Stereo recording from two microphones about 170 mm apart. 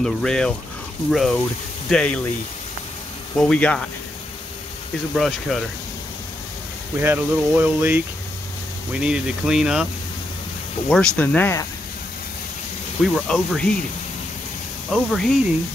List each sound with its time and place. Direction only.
0.0 s speech: 5° left (ahead or behind)
3.3 s speech: 5° left (ahead or behind)
5.1 s speech: centre (ahead or behind)
7.0 s speech: 10° right (ahead or behind)
9.0 s speech: 5° right (ahead or behind)
10.9 s speech: 5° left (ahead or behind)
13.0 s speech: centre (ahead or behind)
14.9 s speech: 5° left (ahead or behind)